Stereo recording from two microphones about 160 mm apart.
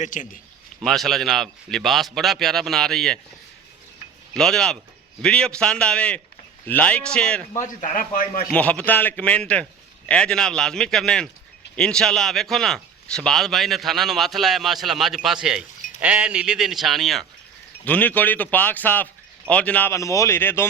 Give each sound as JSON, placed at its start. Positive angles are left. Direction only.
{"t": 0.0, "sound": "a man's voice", "side_deg": 55}
{"t": 0.8, "sound": "speech", "side_deg": 0}
{"t": 4.4, "sound": "speech", "side_deg": 5}
{"t": 7.6, "sound": "a man's voice", "side_deg": 50}
{"t": 8.5, "sound": "speech", "side_deg": 10}